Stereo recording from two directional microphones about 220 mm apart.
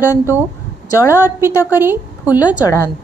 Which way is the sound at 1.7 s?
10° right (ahead or behind).